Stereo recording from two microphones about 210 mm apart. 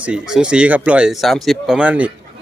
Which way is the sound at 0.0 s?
5° right (ahead or behind).